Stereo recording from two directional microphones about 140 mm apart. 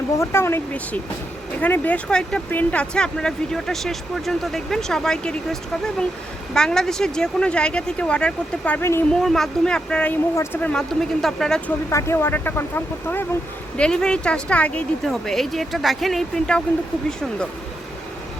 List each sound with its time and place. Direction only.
0.2 s speech: 20° left (ahead or behind)
9.2 s speech: centre (ahead or behind)
11.9 s speech: 20° left (ahead or behind); by 16.6 s 5° left (ahead or behind)